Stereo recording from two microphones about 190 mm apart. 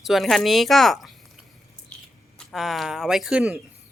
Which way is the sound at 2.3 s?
Centre (ahead or behind).